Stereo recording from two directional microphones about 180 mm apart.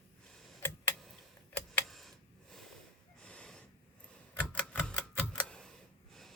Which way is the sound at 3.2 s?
5° left (ahead or behind).